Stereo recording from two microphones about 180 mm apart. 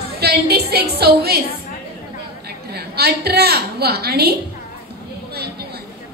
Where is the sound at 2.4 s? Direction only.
60° right (ahead or behind).